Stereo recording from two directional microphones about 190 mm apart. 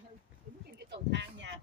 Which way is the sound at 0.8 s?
70° right (ahead or behind).